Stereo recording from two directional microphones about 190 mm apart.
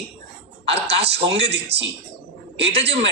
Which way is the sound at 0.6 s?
65° right (ahead or behind).